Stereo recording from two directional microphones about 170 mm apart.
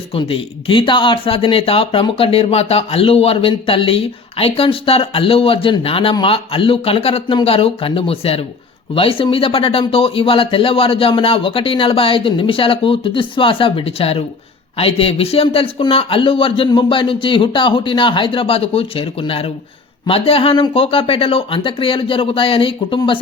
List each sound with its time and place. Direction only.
0.1 s speech: 30° left (ahead or behind)